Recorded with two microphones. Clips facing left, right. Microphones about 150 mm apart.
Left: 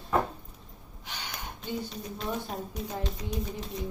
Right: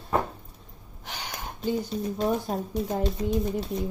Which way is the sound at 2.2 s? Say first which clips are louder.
Right 7 dB; 40° right (ahead or behind).